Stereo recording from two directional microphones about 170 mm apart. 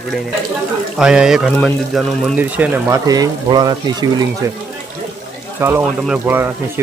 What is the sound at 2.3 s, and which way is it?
Speech, 10° right (ahead or behind).